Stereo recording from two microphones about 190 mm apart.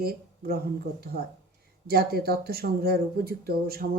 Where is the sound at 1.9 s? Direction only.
55° right (ahead or behind).